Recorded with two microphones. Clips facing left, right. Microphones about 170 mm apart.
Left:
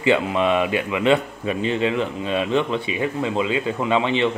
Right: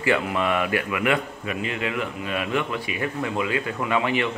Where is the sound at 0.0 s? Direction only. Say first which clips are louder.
Left 4 dB; 20° left (ahead or behind).